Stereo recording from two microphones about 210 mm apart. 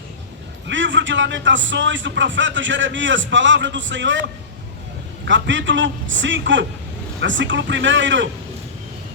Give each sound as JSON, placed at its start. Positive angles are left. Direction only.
{"t": 0.7, "sound": "speech", "side_deg": -60}